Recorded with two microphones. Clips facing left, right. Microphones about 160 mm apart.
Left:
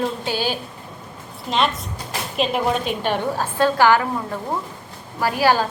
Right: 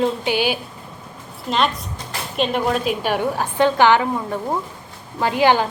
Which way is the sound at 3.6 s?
20° right (ahead or behind).